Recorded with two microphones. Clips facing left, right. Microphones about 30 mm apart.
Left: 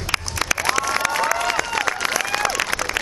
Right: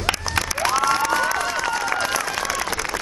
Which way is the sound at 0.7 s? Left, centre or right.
Left.